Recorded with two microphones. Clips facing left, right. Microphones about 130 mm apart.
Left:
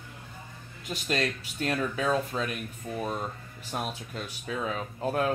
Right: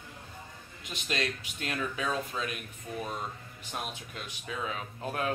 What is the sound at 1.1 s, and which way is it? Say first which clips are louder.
Speech: left 4 dB; 40° left (ahead or behind).